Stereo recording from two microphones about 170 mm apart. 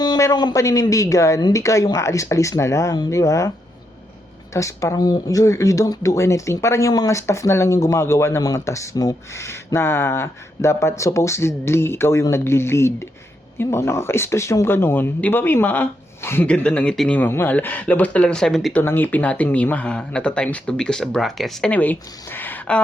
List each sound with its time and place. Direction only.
0.0 s speech: 20° left (ahead or behind)
4.5 s speech: 15° left (ahead or behind)